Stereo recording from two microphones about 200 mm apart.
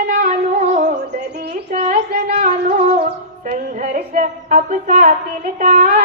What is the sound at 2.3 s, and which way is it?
Music, 35° right (ahead or behind).